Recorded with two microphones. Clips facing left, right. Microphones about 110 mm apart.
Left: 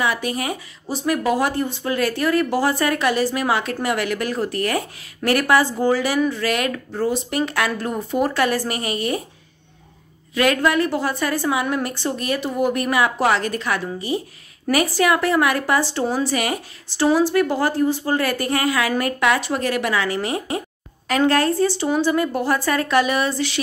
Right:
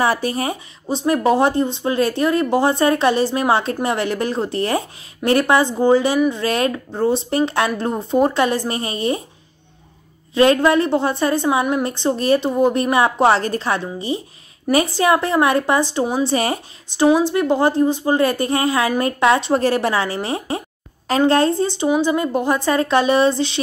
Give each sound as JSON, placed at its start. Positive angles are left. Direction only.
{"t": 0.0, "sound": "speech", "side_deg": -35}
{"t": 10.3, "sound": "speech", "side_deg": -25}
{"t": 16.3, "sound": "speech", "side_deg": -30}
{"t": 16.9, "sound": "speech", "side_deg": -20}